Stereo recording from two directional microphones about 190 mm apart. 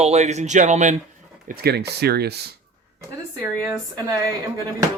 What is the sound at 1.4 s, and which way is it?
Speech, 50° right (ahead or behind).